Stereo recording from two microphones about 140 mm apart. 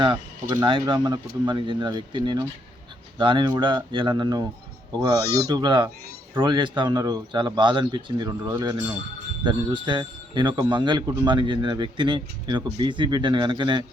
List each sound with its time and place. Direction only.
0.0 s a man's voice: 35° right (ahead or behind)